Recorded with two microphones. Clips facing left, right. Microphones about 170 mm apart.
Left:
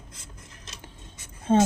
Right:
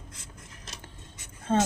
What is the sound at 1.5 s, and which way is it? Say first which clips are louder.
Speech: left 5 dB; 20° left (ahead or behind).